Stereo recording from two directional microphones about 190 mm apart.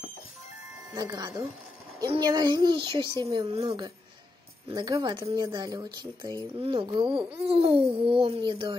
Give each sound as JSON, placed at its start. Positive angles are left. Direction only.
{"t": 0.9, "sound": "a woman's voice", "side_deg": -20}